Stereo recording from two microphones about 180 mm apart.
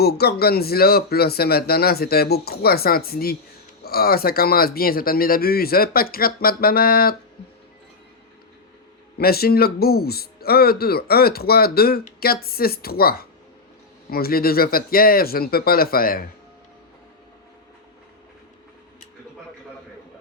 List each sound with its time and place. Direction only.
0.0 s speech: 60° left (ahead or behind)
9.1 s speech: 60° left (ahead or behind)